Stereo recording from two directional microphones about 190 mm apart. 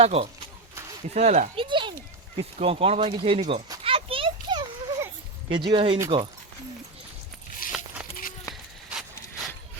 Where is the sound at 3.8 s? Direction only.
30° right (ahead or behind).